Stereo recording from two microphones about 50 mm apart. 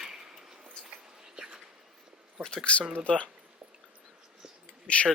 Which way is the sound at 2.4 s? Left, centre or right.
Centre.